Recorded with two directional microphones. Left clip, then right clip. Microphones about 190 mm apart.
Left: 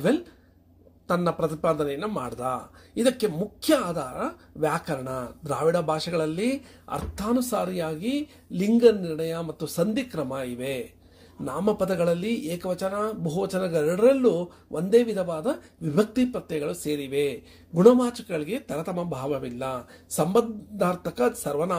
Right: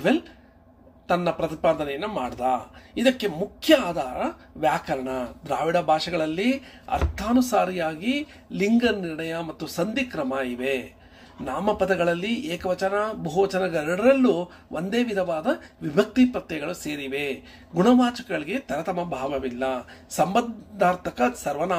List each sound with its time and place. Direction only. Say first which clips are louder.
1.0 s speech: right 1 dB; 55° left (ahead or behind)